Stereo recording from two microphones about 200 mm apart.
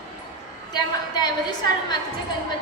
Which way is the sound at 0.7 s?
20° left (ahead or behind).